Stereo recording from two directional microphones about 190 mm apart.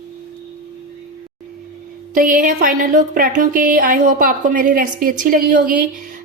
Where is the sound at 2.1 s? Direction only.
45° right (ahead or behind).